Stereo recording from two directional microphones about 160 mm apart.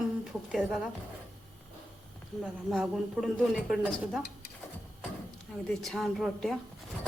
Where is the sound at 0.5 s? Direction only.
Centre (ahead or behind).